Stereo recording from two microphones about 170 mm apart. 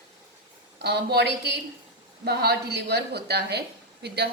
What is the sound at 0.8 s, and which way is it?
Speech, 75° right (ahead or behind).